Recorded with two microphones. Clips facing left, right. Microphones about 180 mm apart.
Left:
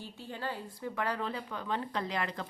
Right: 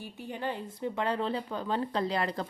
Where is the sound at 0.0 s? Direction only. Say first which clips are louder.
Right 4 dB; 15° right (ahead or behind).